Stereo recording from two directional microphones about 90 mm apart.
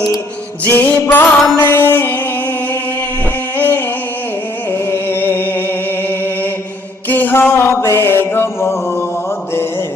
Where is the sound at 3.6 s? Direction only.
20° left (ahead or behind).